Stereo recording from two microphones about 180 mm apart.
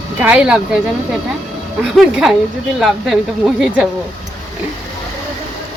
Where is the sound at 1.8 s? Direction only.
Centre (ahead or behind).